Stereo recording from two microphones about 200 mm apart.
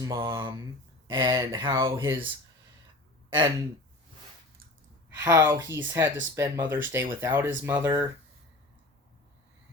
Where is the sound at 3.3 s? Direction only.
20° right (ahead or behind).